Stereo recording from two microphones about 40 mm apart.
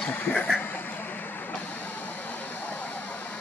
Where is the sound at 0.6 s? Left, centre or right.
Left.